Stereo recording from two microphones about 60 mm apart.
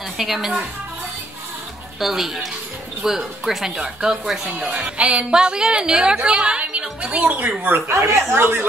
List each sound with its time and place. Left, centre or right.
0.2 s speech: centre
2.0 s speech: centre; by 7.5 s right
7.9 s speech: right